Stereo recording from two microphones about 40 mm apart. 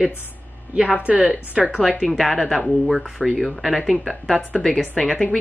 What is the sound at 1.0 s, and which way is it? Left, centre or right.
Speech, right.